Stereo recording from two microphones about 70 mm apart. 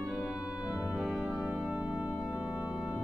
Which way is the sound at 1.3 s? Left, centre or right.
Centre.